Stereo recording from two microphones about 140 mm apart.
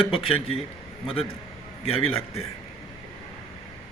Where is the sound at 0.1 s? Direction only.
40° left (ahead or behind).